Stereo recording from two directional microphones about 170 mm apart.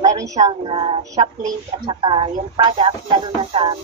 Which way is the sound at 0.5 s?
30° right (ahead or behind).